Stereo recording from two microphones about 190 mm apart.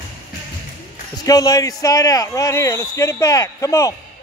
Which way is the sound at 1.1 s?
20° left (ahead or behind).